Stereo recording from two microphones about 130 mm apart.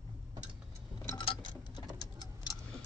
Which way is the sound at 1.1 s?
40° left (ahead or behind).